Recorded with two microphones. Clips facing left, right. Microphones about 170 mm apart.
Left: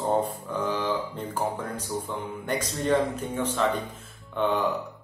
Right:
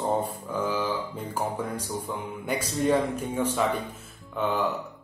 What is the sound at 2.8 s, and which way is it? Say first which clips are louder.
Speech: even; 10° right (ahead or behind).